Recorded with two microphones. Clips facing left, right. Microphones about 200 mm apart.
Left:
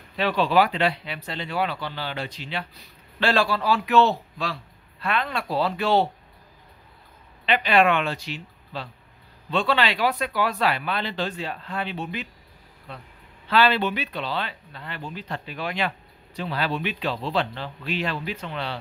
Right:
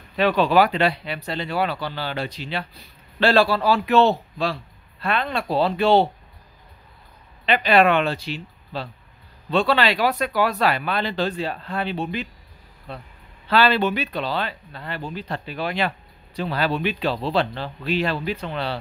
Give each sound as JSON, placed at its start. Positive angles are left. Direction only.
{"t": 0.2, "sound": "speech", "side_deg": -50}
{"t": 7.4, "sound": "speech", "side_deg": -40}